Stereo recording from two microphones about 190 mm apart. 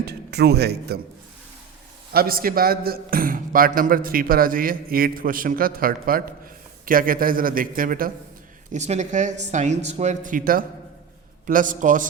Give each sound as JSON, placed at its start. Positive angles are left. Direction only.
{"t": 0.0, "sound": "a man's voice", "side_deg": -60}
{"t": 2.1, "sound": "a man's voice", "side_deg": -50}
{"t": 8.7, "sound": "a man's voice", "side_deg": -40}